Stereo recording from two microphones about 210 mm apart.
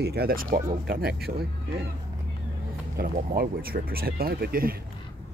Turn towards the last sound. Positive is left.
turn(degrees=-45)  # may be behind; listen again after turning